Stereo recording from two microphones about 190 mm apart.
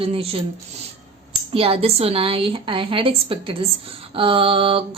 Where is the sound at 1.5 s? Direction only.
30° right (ahead or behind).